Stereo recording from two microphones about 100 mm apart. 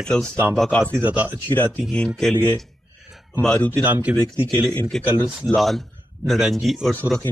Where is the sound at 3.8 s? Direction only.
15° right (ahead or behind).